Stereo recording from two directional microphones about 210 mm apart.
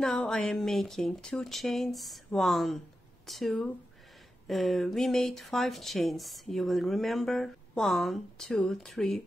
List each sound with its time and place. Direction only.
0.0 s speech: 5° left (ahead or behind)